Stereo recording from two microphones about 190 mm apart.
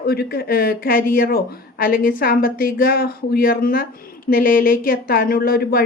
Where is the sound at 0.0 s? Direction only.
55° left (ahead or behind).